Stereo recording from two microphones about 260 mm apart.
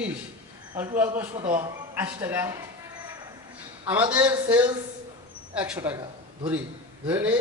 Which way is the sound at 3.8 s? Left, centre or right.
Centre.